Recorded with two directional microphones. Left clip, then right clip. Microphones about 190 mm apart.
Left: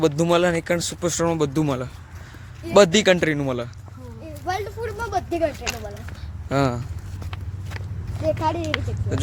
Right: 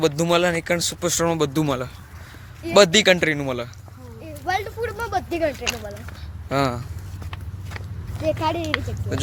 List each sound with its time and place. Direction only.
0.2 s speech: 15° left (ahead or behind)
2.7 s speech: 15° left (ahead or behind)
4.4 s a sound: 40° right (ahead or behind)
6.5 s speech: 15° left (ahead or behind)
8.2 s speech: 40° right (ahead or behind)